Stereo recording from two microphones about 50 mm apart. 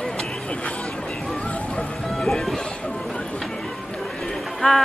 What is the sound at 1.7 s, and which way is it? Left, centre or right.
Music, centre.